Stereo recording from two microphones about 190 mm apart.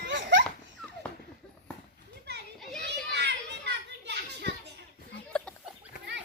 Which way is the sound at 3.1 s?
65° right (ahead or behind).